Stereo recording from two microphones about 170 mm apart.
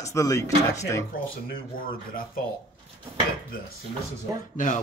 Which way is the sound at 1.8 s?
60° left (ahead or behind).